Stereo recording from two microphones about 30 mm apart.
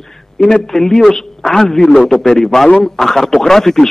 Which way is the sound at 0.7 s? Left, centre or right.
Centre.